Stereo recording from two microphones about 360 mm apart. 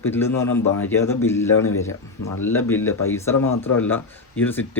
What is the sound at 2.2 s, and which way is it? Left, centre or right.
Speech, left.